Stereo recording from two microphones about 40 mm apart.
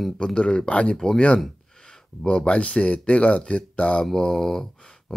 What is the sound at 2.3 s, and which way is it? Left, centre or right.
Speech, left.